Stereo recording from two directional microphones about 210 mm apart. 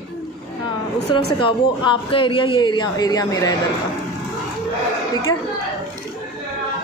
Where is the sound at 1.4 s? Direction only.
25° left (ahead or behind).